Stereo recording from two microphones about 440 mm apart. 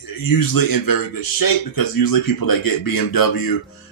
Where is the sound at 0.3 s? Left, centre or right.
Left.